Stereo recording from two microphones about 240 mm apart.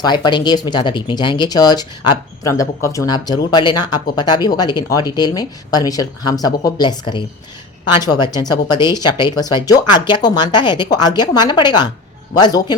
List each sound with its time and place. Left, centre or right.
0.0 s speech: centre